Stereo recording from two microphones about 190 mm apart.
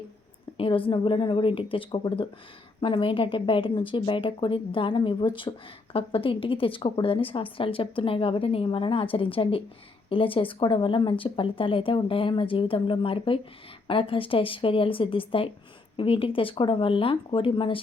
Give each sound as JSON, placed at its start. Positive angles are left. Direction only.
{"t": 0.5, "sound": "a woman's voice", "side_deg": 30}